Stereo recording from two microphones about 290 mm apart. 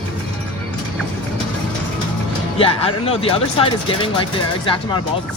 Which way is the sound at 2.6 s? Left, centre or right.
Centre.